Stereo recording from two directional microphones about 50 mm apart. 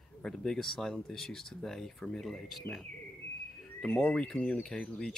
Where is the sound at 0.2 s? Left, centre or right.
Centre.